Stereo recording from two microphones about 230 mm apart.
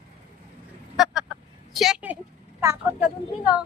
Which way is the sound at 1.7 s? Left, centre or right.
Centre.